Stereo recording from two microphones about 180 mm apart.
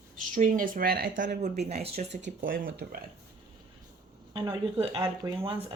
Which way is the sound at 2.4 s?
55° right (ahead or behind).